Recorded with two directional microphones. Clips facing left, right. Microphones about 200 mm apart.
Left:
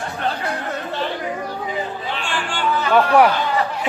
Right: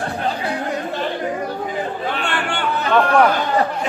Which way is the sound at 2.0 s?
55° right (ahead or behind).